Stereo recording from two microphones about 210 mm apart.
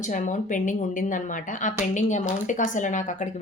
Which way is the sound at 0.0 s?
35° left (ahead or behind).